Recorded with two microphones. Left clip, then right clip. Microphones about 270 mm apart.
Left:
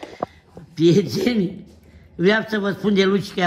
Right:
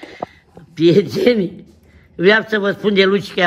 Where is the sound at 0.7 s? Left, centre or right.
Centre.